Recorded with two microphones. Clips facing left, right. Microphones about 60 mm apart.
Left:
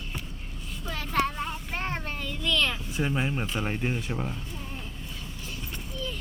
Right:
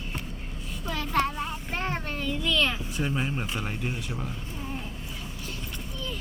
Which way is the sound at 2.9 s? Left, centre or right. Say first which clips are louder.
Left 1 dB; centre.